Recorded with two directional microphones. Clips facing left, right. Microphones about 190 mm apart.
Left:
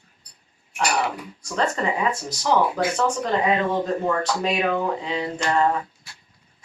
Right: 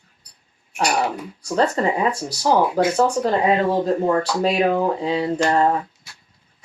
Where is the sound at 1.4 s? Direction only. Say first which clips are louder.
Right 5 dB; 35° right (ahead or behind).